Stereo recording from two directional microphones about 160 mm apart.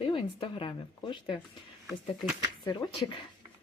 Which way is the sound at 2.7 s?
30° left (ahead or behind).